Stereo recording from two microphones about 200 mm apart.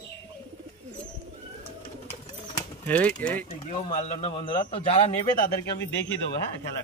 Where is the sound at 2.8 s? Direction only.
5° left (ahead or behind).